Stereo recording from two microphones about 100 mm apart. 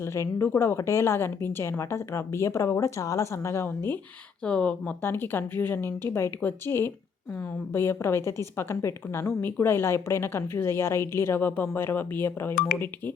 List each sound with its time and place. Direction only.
0.0 s a woman's voice: 30° left (ahead or behind)
4.4 s speech: 10° left (ahead or behind)
5.0 s a woman's voice: 20° left (ahead or behind)